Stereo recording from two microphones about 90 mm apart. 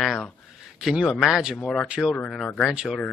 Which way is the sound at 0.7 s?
5° right (ahead or behind).